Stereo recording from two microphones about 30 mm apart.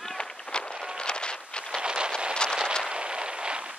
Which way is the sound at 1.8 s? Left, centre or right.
Right.